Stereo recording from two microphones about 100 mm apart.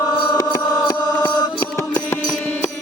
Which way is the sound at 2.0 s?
20° left (ahead or behind).